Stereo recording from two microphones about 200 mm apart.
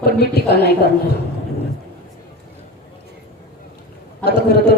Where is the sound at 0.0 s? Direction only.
55° left (ahead or behind).